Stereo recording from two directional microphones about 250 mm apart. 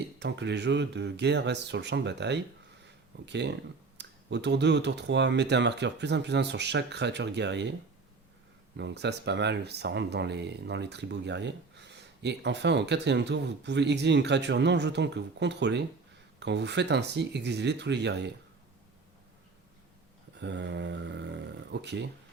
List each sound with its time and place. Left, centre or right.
0.2 s speech: right
8.7 s speech: right
20.3 s speech: right